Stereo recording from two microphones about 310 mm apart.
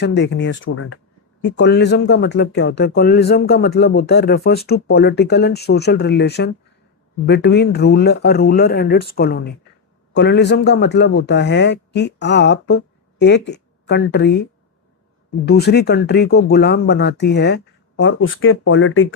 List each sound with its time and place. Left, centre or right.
0.0 s speech: left
15.4 s speech: left